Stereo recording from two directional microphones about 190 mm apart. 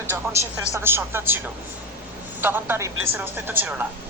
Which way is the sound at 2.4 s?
10° right (ahead or behind).